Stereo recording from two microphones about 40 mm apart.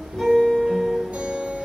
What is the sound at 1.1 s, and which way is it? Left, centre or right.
Music, right.